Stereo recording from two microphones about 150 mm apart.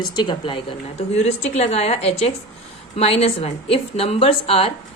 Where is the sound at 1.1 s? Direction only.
45° left (ahead or behind).